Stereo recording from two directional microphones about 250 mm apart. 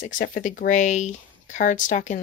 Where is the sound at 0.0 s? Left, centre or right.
Left.